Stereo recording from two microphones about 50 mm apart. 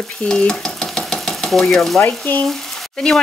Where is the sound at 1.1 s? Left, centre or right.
Centre.